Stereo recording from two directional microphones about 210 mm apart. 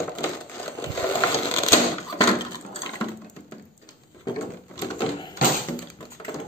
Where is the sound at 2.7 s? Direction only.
20° left (ahead or behind).